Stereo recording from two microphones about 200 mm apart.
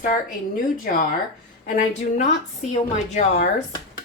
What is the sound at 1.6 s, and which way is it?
Speech, 40° left (ahead or behind).